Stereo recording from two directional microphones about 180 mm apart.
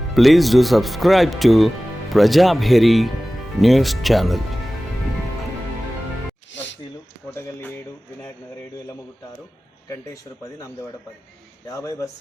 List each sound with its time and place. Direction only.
0.1 s speech: centre (ahead or behind)
6.5 s a sound: 90° left
11.7 s speech: 15° left (ahead or behind)